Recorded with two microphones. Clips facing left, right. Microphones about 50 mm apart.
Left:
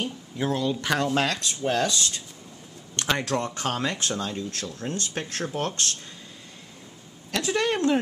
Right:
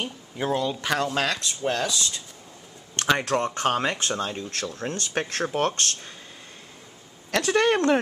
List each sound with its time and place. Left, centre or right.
0.0 s speech: centre
3.3 s speech: right
7.2 s a woman's voice: right